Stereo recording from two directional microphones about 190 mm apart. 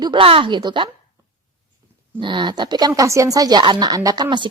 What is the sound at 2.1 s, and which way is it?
A woman's voice, 25° right (ahead or behind).